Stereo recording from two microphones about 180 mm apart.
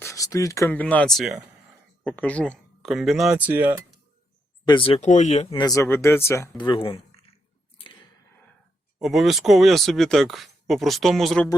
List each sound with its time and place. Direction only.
0.0 s speech: 15° left (ahead or behind); by 3.8 s 10° right (ahead or behind)
4.6 s speech: 30° left (ahead or behind)
5.5 s speech: 20° left (ahead or behind)
6.6 s speech: 30° left (ahead or behind)
9.0 s speech: centre (ahead or behind)